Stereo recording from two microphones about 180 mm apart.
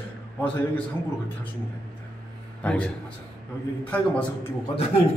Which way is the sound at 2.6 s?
10° left (ahead or behind).